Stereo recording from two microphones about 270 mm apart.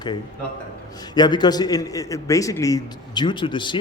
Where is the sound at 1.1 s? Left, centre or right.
Centre.